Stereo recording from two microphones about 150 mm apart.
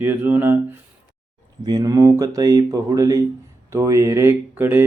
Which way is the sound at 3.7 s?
20° right (ahead or behind).